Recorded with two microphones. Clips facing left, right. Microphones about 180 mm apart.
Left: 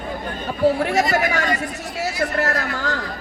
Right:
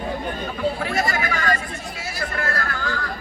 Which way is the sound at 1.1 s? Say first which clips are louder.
Left 3 dB; 70° left (ahead or behind).